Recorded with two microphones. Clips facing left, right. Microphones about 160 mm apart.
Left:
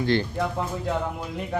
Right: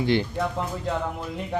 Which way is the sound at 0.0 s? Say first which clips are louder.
Even; 15° right (ahead or behind).